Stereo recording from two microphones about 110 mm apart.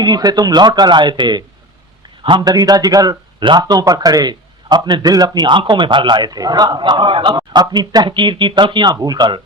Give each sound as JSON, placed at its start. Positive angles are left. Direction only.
{"t": 0.0, "sound": "a man's voice", "side_deg": -35}